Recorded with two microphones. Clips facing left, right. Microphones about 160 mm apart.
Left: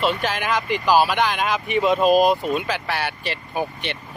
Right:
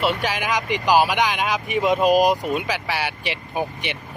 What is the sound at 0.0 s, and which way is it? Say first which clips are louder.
Speech: even; 10° right (ahead or behind).